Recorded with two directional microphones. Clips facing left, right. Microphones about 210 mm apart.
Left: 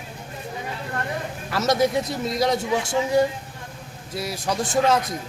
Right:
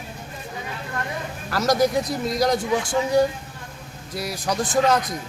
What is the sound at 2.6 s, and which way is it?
Speech, 25° left (ahead or behind).